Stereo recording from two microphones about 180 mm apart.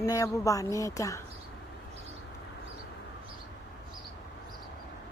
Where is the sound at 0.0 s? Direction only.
20° left (ahead or behind).